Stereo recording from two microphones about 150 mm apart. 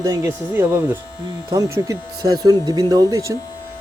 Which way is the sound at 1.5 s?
25° right (ahead or behind).